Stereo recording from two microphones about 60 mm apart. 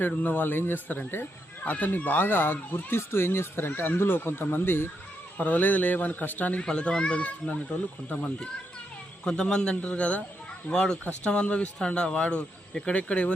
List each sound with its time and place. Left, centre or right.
0.2 s a man's voice: left
5.4 s a man's voice: left
6.6 s speech: centre
9.2 s speech: centre
10.7 s speech: centre